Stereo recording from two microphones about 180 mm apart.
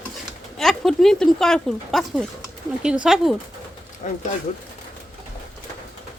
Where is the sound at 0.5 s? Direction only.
Centre (ahead or behind).